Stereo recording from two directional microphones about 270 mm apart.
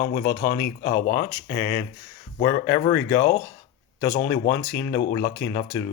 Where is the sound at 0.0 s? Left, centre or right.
Left.